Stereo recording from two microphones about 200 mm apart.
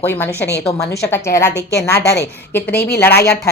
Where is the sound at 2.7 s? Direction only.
55° left (ahead or behind).